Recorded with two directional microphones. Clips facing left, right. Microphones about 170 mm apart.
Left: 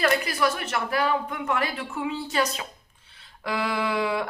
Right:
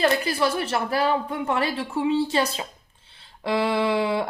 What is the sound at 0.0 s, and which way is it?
Speech, 25° right (ahead or behind).